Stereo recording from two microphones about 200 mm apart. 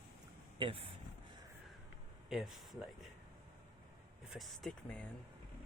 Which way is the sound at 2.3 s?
Centre (ahead or behind).